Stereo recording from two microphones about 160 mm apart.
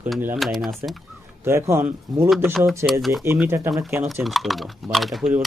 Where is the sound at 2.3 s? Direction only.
Centre (ahead or behind).